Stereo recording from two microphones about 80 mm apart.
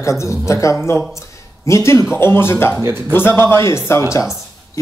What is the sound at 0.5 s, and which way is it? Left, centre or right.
Speech, left.